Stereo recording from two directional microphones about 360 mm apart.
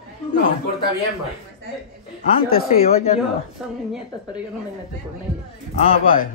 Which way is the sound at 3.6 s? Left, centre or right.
Centre.